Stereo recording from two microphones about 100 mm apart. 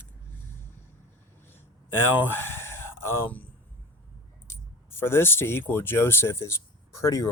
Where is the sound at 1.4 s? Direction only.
20° left (ahead or behind).